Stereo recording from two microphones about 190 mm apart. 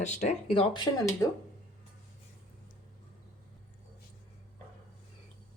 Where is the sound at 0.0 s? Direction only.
35° left (ahead or behind).